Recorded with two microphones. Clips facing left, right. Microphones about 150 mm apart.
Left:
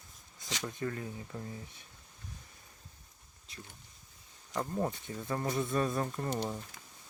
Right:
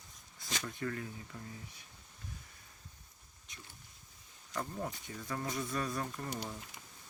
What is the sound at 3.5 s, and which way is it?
Speech, 35° left (ahead or behind).